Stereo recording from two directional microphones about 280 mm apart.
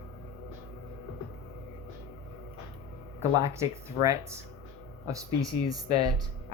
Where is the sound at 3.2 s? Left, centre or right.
Centre.